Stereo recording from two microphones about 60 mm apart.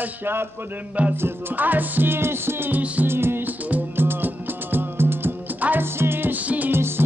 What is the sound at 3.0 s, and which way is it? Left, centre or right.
Music, right.